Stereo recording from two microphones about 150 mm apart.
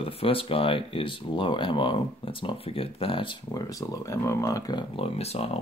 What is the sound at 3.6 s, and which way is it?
Speech, 20° left (ahead or behind).